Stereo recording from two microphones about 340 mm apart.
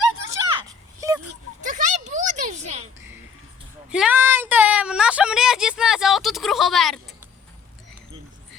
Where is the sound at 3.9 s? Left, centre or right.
Centre.